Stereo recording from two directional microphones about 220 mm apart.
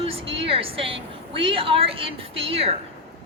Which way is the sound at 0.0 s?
25° right (ahead or behind).